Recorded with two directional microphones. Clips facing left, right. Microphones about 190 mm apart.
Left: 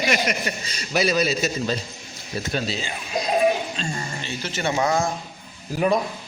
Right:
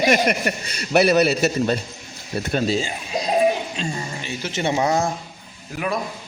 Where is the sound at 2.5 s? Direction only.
45° right (ahead or behind).